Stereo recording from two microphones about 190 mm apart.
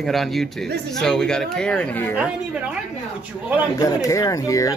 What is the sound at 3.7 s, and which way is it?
Speech, 15° left (ahead or behind).